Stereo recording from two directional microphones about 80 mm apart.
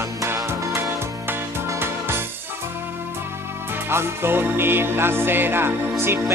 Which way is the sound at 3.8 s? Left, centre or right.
Right.